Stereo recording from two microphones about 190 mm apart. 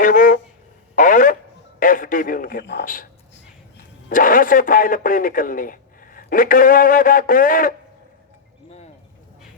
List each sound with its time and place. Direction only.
0.0 s a sound: 45° left (ahead or behind)
1.8 s a man's voice: 45° left (ahead or behind)
4.1 s speech: 45° left (ahead or behind)